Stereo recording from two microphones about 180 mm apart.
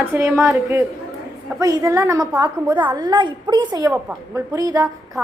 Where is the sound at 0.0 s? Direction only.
15° right (ahead or behind).